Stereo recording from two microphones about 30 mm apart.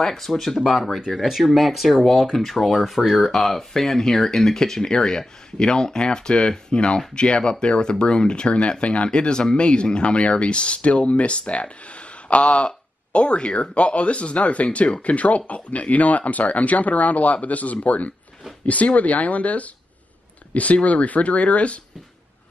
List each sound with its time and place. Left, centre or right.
0.0 s speech: centre
1.1 s speech: centre
3.2 s speech: centre; by 21.7 s left